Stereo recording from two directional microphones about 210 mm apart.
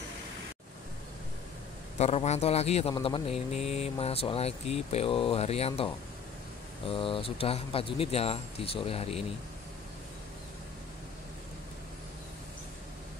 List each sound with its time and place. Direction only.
2.0 s speech: 30° left (ahead or behind)